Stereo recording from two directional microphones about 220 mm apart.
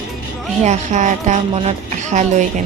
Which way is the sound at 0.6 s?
35° right (ahead or behind).